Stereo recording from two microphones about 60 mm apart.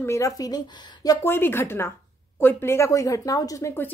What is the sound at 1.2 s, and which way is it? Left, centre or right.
A woman's voice, left.